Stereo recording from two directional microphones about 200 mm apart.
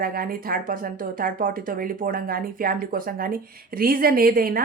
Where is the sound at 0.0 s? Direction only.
45° right (ahead or behind).